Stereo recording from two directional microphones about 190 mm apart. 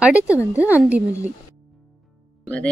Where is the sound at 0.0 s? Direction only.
5° right (ahead or behind).